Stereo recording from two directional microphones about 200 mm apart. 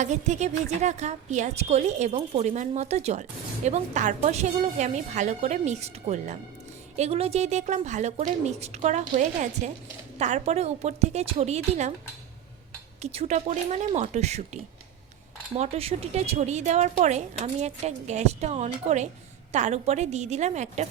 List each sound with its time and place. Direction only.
0.0 s a woman's voice: 35° right (ahead or behind)
13.0 s a woman's voice: 30° right (ahead or behind)